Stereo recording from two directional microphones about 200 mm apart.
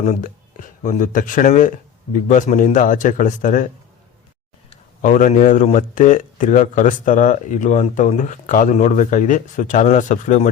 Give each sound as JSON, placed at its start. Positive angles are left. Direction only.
{"t": 0.0, "sound": "speech", "side_deg": 40}
{"t": 4.7, "sound": "speech", "side_deg": 40}